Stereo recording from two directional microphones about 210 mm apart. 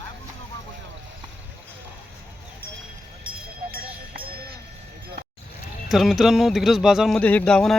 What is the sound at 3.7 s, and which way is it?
Clip-clop, 45° right (ahead or behind).